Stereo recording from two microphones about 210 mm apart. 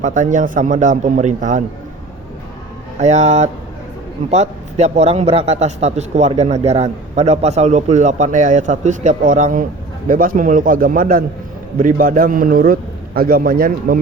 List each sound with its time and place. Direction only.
0.0 s a man's voice: 35° right (ahead or behind)
3.0 s a man's voice: 35° right (ahead or behind)